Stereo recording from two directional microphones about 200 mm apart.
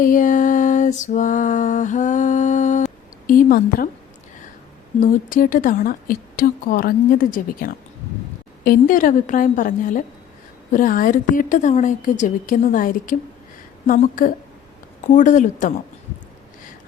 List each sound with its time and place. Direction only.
0.0 s mantra: 40° left (ahead or behind)
3.2 s a woman's voice: 45° left (ahead or behind)
4.9 s a woman's voice: 40° left (ahead or behind)
10.7 s mantra: 45° left (ahead or behind)
13.8 s a woman's voice: 40° left (ahead or behind)
15.0 s mantra: 40° left (ahead or behind)